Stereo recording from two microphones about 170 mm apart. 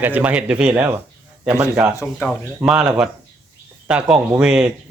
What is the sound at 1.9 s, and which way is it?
Speech, 10° left (ahead or behind).